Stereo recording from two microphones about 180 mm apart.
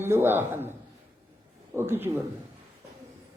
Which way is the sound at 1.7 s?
15° right (ahead or behind).